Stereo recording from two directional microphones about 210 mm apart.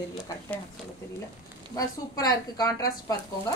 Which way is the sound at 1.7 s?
15° left (ahead or behind).